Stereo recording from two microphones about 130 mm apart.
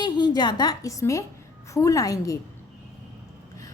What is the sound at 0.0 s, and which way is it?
A woman's voice, 35° left (ahead or behind).